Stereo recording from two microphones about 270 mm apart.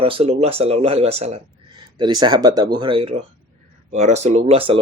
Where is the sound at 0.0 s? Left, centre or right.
Centre.